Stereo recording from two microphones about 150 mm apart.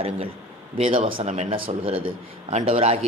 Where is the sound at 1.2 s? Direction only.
50° right (ahead or behind).